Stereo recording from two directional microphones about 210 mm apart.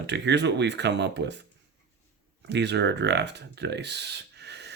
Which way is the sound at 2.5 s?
55° right (ahead or behind).